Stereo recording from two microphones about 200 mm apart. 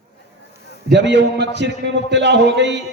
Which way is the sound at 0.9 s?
60° right (ahead or behind).